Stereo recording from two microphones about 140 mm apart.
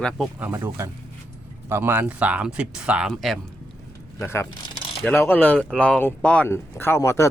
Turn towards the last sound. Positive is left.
turn(degrees=20)  # may be behind; listen again after turning